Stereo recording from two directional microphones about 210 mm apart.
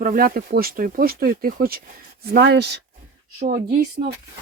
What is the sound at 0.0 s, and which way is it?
Speech, 45° right (ahead or behind).